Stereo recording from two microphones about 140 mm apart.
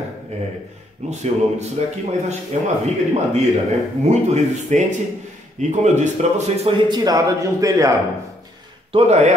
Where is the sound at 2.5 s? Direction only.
55° right (ahead or behind).